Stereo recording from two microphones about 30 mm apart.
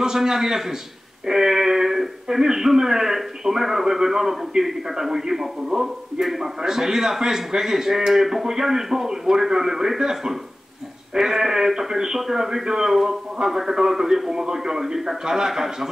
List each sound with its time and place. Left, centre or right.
0.0 s a man's voice: centre
1.2 s a sound: centre
2.2 s a man's voice: centre
6.2 s a man's voice: centre
6.6 s a man's voice: centre